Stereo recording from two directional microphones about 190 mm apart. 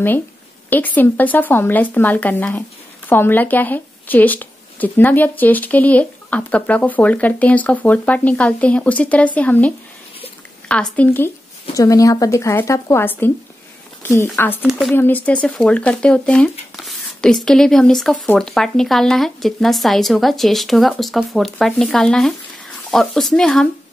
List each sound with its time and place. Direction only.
0.7 s speech: 10° left (ahead or behind)
14.6 s speech: centre (ahead or behind)
15.0 s speech: 10° left (ahead or behind)